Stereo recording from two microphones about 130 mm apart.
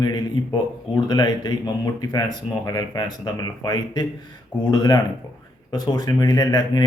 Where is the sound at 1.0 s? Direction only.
30° left (ahead or behind).